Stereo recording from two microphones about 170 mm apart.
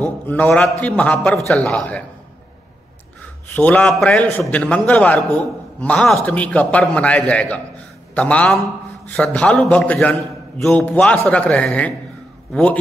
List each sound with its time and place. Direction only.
0.0 s a man's voice: 10° left (ahead or behind)
3.5 s a man's voice: 10° left (ahead or behind)